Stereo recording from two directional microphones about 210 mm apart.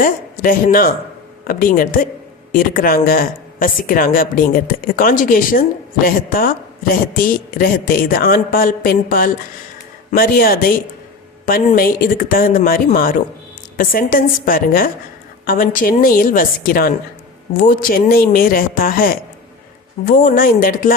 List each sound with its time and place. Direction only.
0.0 s speech: 40° left (ahead or behind)